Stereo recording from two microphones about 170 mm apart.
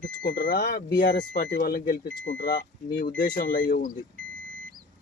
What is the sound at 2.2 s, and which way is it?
Speech, 90° left.